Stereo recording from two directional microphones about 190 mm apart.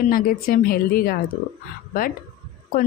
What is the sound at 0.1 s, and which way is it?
Speech, 50° left (ahead or behind).